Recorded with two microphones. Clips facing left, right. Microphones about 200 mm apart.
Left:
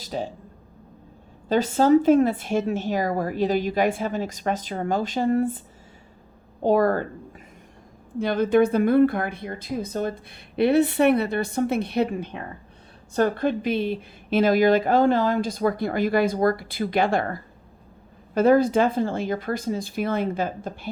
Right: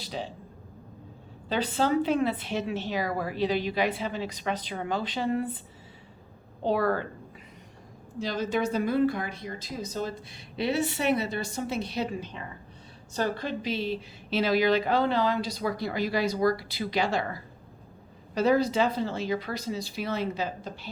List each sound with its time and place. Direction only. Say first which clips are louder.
0.0 s a sound: left 6 dB; 45° left (ahead or behind)
1.5 s speech: left 8 dB; 45° left (ahead or behind)
6.6 s speech: left 6 dB; 45° left (ahead or behind)
8.2 s a woman's voice: left 9 dB; 55° left (ahead or behind)